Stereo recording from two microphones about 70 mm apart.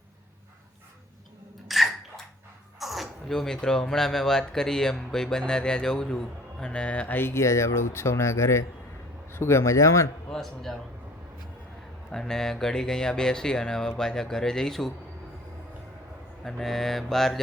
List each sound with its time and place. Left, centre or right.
1.6 s bathtub: centre
2.8 s speech: centre
7.2 s speech: left
7.4 s speech: left
10.2 s mantra: centre
12.1 s speech: centre
16.4 s mantra: centre